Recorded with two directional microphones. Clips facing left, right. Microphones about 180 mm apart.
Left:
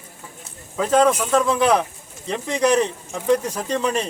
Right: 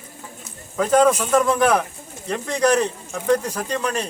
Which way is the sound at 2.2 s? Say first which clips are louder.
Even; 20° left (ahead or behind).